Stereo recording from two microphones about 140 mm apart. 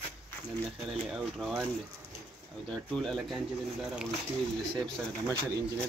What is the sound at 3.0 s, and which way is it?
Speech, centre (ahead or behind).